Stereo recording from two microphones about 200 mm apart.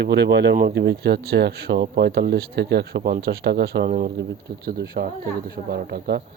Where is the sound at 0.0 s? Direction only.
55° right (ahead or behind).